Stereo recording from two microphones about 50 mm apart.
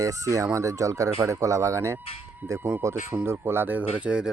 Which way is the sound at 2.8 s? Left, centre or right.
Right.